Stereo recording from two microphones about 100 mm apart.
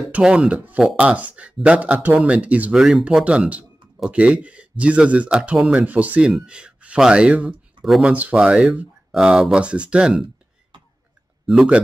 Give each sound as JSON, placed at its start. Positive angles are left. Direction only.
{"t": 0.1, "sound": "speech", "side_deg": -10}
{"t": 7.8, "sound": "speech", "side_deg": 0}
{"t": 8.1, "sound": "speech", "side_deg": -15}
{"t": 11.4, "sound": "speech", "side_deg": -5}